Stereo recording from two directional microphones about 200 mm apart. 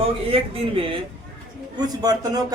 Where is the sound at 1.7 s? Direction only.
20° right (ahead or behind).